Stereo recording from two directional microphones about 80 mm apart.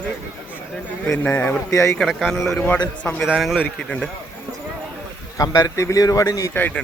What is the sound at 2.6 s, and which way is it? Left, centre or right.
Speech, left.